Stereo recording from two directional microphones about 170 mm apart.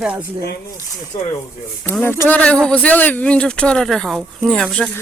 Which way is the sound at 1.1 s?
20° left (ahead or behind).